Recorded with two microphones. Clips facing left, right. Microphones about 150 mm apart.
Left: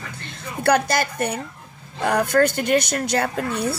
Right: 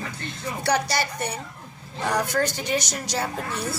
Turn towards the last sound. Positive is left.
turn(degrees=60)  # may be behind; listen again after turning